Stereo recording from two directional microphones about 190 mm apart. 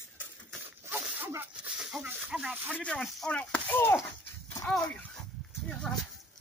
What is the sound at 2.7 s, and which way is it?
Speech, 5° left (ahead or behind).